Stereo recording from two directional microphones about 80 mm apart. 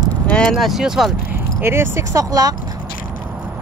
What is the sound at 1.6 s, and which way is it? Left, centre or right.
Speech, right.